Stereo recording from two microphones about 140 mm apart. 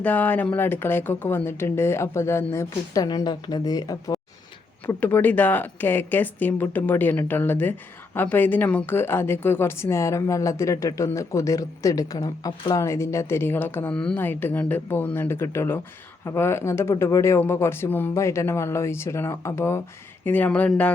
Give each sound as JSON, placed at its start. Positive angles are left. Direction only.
{"t": 0.0, "sound": "a woman's voice", "side_deg": 10}
{"t": 4.9, "sound": "a woman's voice", "side_deg": 15}